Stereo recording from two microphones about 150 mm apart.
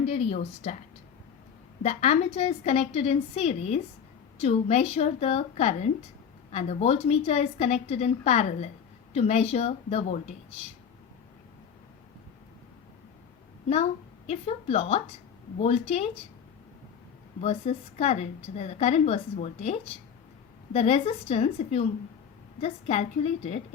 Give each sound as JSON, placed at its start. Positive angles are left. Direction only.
{"t": 0.0, "sound": "a woman's voice", "side_deg": 45}
{"t": 1.8, "sound": "a woman's voice", "side_deg": 45}
{"t": 14.3, "sound": "a woman's voice", "side_deg": 40}
{"t": 17.4, "sound": "a woman's voice", "side_deg": 40}
{"t": 20.7, "sound": "a woman's voice", "side_deg": 40}